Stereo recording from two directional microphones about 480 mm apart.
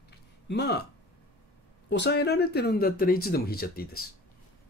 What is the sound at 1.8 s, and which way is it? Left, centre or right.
Speech, left.